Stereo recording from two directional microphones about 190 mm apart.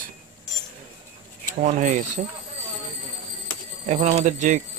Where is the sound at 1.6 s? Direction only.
40° right (ahead or behind).